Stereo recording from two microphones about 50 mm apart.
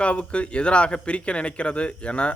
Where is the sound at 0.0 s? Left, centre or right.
Left.